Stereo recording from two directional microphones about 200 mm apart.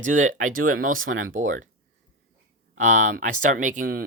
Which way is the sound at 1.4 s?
40° right (ahead or behind).